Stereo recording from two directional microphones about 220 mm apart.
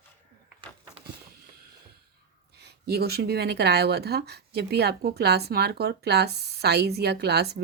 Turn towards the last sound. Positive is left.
turn(degrees=-50)  # may be behind; listen again after turning